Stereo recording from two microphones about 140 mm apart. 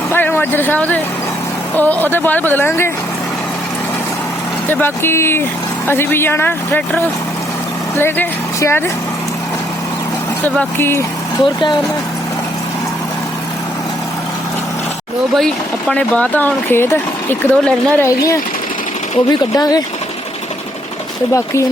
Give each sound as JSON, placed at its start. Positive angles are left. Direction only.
{"t": 0.1, "sound": "speech", "side_deg": 15}
{"t": 4.7, "sound": "speech", "side_deg": 15}
{"t": 10.4, "sound": "speech", "side_deg": 15}
{"t": 11.3, "sound": "speech", "side_deg": 30}
{"t": 15.4, "sound": "speech", "side_deg": 5}
{"t": 19.5, "sound": "speech", "side_deg": 25}